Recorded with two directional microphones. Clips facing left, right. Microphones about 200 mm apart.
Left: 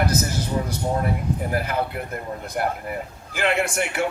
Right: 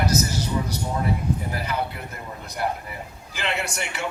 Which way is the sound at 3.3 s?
50° left (ahead or behind).